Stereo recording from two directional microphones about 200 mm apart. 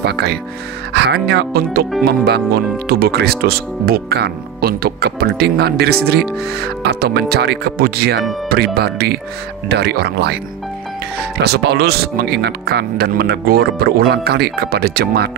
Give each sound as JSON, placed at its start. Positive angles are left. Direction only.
{"t": 0.0, "sound": "speech", "side_deg": -55}
{"t": 11.4, "sound": "speech", "side_deg": -55}